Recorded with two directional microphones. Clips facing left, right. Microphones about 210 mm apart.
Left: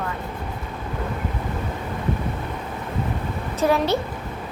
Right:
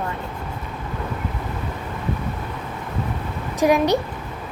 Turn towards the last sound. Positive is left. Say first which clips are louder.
# right 3 dB
turn(degrees=-15)  # may be behind; listen again after turning